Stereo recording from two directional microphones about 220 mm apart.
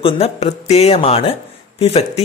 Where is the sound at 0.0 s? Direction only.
30° left (ahead or behind).